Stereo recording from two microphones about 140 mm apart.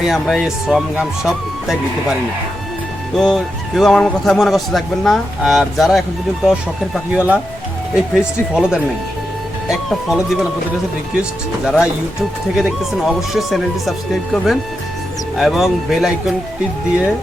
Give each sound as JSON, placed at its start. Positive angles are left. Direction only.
{"t": 0.0, "sound": "speech", "side_deg": 0}
{"t": 3.2, "sound": "speech", "side_deg": 0}